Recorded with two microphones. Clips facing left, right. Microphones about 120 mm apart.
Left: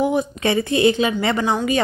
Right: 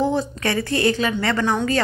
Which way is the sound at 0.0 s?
15° left (ahead or behind).